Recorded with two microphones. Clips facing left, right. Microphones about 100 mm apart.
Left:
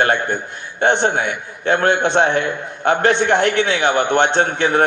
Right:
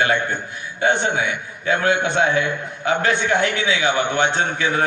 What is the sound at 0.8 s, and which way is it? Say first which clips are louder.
A man's voice: left 3 dB; 60° left (ahead or behind).